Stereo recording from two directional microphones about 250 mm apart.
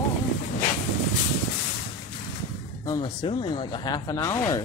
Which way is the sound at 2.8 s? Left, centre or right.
Centre.